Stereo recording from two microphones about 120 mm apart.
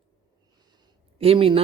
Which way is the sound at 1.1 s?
50° right (ahead or behind).